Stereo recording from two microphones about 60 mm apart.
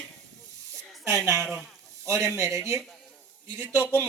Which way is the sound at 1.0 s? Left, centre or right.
Right.